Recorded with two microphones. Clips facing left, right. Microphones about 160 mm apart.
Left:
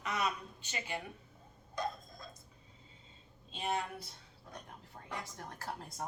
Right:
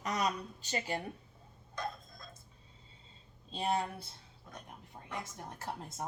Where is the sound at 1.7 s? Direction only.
10° left (ahead or behind).